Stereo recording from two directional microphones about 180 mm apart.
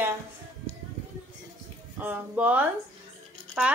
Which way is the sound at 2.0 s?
10° right (ahead or behind).